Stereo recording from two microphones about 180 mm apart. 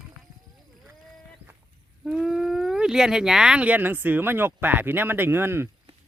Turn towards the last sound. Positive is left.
turn(degrees=-15)  # may be behind; listen again after turning